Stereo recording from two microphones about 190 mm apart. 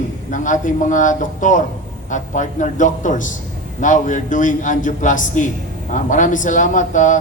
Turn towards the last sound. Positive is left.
turn(degrees=40)  # may be behind; listen again after turning